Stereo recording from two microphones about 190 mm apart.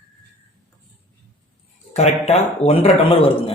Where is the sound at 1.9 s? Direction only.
35° left (ahead or behind).